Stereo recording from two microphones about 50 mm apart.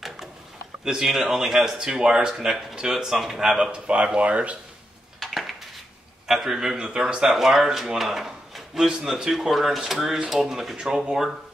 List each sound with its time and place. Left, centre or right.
0.8 s speech: centre
3.7 s speech: right
5.2 s a sound: centre
6.2 s speech: centre